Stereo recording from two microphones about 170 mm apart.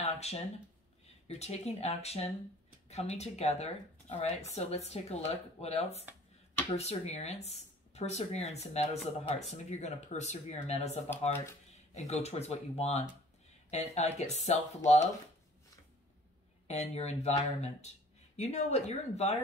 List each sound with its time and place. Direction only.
0.0 s a sound: 40° left (ahead or behind)
1.2 s speech: 40° left (ahead or behind)
16.6 s speech: 40° left (ahead or behind)